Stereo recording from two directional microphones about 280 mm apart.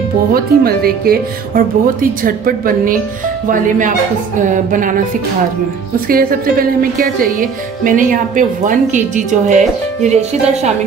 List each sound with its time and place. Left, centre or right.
0.3 s speech: right
6.0 s speech: right